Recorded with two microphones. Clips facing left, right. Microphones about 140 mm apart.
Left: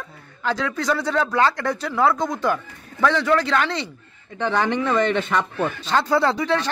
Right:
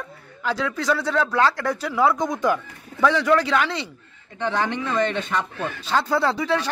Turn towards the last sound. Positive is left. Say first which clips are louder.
# left 1 dB
turn(degrees=-5)  # may be behind; listen again after turning